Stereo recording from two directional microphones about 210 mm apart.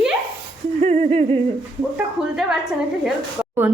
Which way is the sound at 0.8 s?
35° right (ahead or behind).